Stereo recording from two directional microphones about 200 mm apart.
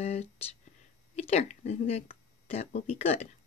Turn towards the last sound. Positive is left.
turn(degrees=30)  # may be behind; listen again after turning